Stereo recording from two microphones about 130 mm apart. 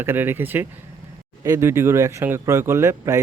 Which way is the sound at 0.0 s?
15° right (ahead or behind).